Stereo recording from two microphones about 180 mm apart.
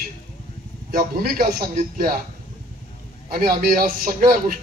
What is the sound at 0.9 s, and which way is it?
A man's voice, 55° right (ahead or behind).